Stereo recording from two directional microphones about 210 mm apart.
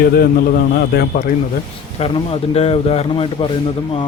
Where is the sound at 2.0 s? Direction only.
30° left (ahead or behind).